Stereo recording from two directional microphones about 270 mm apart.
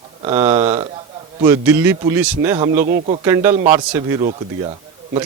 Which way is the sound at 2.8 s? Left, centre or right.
Right.